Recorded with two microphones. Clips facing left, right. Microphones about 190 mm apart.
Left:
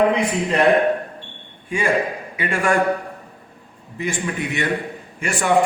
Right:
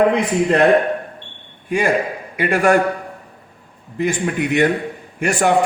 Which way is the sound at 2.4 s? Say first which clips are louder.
Right 5 dB; 40° right (ahead or behind).